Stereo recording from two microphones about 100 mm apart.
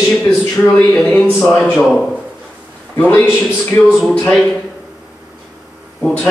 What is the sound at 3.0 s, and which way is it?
Speech, 15° left (ahead or behind).